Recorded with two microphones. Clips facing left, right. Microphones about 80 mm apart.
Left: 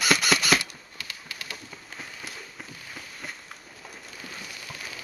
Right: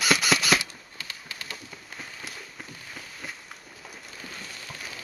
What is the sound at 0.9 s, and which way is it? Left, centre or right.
Bird, right.